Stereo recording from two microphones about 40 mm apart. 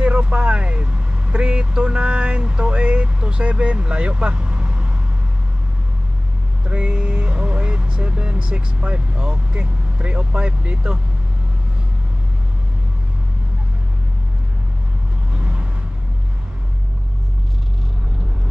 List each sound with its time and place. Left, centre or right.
0.0 s speech: right
6.6 s vehicle: right
9.5 s speech: right
15.3 s vehicle: right